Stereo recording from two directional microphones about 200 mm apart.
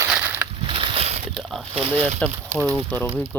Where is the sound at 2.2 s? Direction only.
5° left (ahead or behind).